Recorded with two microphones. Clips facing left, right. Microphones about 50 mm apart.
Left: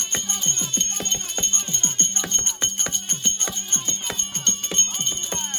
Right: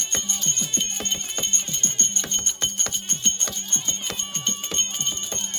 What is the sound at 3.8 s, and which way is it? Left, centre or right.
Music, centre.